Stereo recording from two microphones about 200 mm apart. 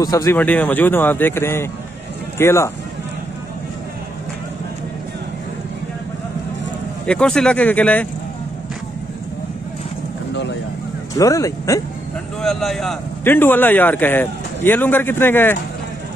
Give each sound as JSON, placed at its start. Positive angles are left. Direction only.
{"t": 0.0, "sound": "a man's voice", "side_deg": 15}
{"t": 7.1, "sound": "a man's voice", "side_deg": 5}
{"t": 11.1, "sound": "a man's voice", "side_deg": 15}
{"t": 12.4, "sound": "a man's voice", "side_deg": 0}